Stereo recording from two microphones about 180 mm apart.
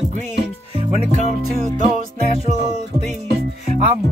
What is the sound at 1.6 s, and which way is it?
Music, 45° right (ahead or behind).